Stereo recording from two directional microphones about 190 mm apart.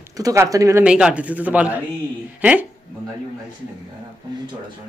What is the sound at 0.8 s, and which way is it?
Speech, 5° right (ahead or behind).